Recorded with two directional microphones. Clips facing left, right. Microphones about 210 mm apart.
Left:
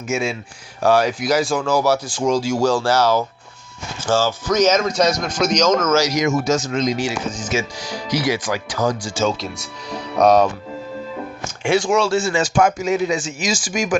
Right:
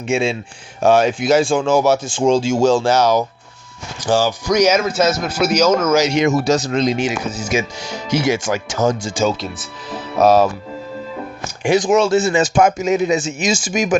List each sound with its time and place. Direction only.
0.1 s a man's voice: 30° right (ahead or behind); by 6.1 s 10° right (ahead or behind)
6.1 s speech: 30° right (ahead or behind)
7.3 s a man's voice: 10° right (ahead or behind)
7.8 s speech: 25° right (ahead or behind)
9.2 s speech: centre (ahead or behind)
11.7 s speech: 20° right (ahead or behind)